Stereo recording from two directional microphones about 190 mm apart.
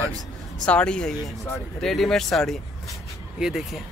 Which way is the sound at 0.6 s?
5° left (ahead or behind).